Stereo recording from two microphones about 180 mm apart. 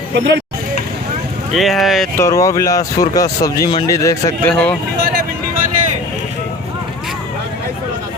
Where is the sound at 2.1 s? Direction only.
15° left (ahead or behind).